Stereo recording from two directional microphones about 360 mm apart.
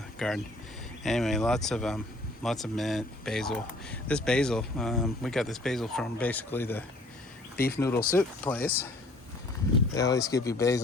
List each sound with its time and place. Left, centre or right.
0.2 s speech: centre
7.5 s speech: left
7.8 s speech: centre
9.9 s speech: centre